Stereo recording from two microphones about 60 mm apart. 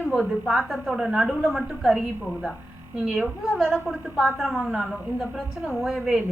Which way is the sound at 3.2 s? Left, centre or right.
Centre.